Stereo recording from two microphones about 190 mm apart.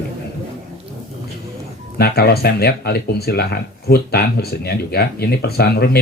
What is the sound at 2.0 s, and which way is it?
Speech, 55° left (ahead or behind).